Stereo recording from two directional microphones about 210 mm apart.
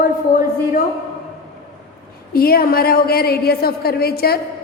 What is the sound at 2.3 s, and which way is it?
A woman's voice, 45° left (ahead or behind).